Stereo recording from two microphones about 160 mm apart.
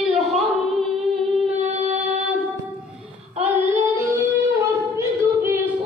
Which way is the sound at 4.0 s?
20° right (ahead or behind).